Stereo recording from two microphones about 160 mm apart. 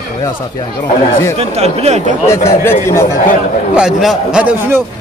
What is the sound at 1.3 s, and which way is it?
Speech, 40° right (ahead or behind).